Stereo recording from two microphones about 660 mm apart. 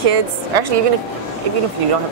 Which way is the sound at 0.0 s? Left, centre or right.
Right.